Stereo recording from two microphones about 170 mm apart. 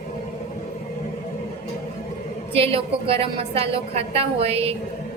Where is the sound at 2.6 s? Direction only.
35° right (ahead or behind).